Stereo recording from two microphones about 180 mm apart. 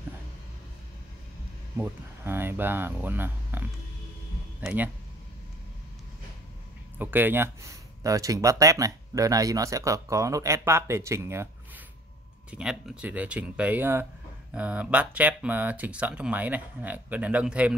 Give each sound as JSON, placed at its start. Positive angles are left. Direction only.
{"t": 1.8, "sound": "speech", "side_deg": -10}
{"t": 7.0, "sound": "speech", "side_deg": -10}